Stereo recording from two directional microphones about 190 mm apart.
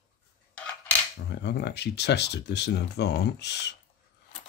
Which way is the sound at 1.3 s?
60° left (ahead or behind).